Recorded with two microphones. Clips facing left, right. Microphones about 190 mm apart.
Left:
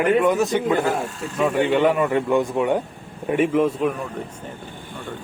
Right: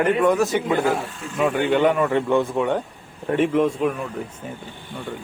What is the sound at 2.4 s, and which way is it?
A man's voice, 15° left (ahead or behind).